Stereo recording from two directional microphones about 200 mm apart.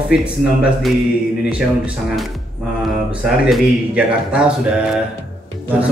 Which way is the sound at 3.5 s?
5° right (ahead or behind).